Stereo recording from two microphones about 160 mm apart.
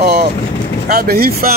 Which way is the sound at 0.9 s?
70° right (ahead or behind).